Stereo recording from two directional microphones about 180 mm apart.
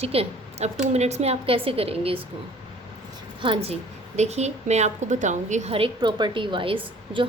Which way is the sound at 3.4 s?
30° right (ahead or behind).